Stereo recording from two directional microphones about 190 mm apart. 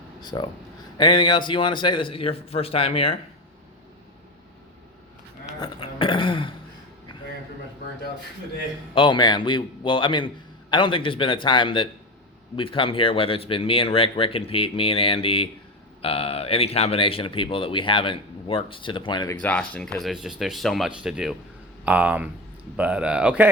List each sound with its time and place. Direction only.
0.2 s speech: 20° left (ahead or behind)
5.5 s throat clearing: 25° left (ahead or behind)
9.0 s speech: 25° left (ahead or behind)
19.4 s speech: 5° left (ahead or behind)